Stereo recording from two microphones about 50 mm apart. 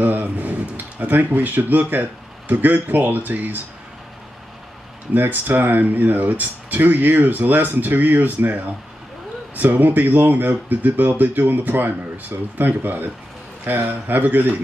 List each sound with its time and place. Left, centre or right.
0.0 s speech: right
5.1 s speech: right